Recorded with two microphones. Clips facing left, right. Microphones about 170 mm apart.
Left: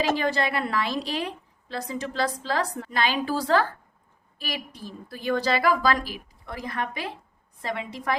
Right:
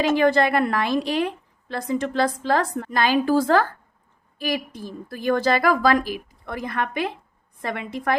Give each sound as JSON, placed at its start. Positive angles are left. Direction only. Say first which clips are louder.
{"t": 0.2, "sound": "a woman's voice", "louder": "right 7 dB", "side_deg": -55}